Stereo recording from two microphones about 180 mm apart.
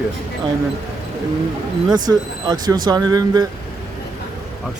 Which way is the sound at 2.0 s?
20° right (ahead or behind).